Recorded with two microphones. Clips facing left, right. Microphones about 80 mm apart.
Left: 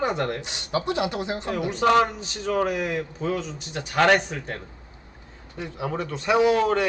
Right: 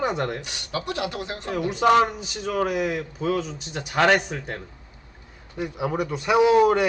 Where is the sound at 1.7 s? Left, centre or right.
Centre.